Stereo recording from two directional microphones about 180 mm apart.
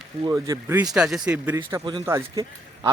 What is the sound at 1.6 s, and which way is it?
A man's voice, 20° right (ahead or behind).